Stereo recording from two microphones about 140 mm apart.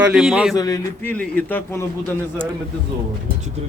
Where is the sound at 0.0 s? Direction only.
5° right (ahead or behind).